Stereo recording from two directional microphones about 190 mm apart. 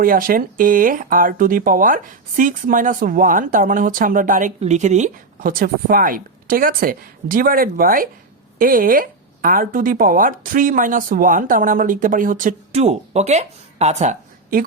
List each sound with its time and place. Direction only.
0.0 s speech: 50° right (ahead or behind)